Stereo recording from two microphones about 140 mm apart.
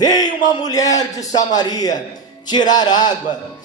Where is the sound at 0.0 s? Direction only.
30° left (ahead or behind).